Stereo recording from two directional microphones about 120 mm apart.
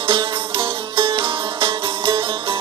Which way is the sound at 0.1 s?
45° right (ahead or behind).